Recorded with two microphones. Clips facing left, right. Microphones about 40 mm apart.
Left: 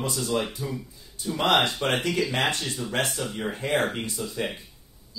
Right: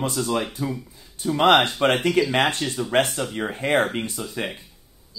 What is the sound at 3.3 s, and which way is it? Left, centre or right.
Speech, right.